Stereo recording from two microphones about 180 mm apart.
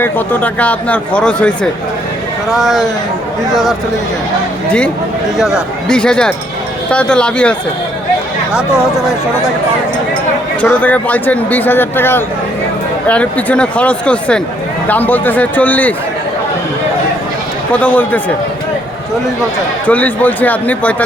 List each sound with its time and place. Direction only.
0.0 s speech: 10° left (ahead or behind)
5.4 s speech: centre (ahead or behind)
8.5 s speech: 5° right (ahead or behind)
10.6 s speech: 10° left (ahead or behind)
17.7 s speech: 10° left (ahead or behind)
19.9 s speech: 10° left (ahead or behind)